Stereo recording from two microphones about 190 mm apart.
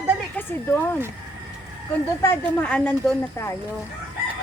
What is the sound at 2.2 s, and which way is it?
Speech, 10° left (ahead or behind).